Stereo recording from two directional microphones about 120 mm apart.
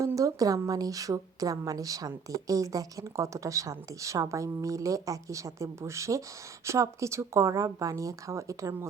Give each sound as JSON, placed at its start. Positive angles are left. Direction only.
{"t": 0.2, "sound": "a woman's voice", "side_deg": -30}